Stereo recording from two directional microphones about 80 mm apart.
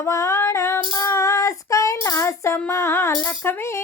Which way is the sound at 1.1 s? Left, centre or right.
Left.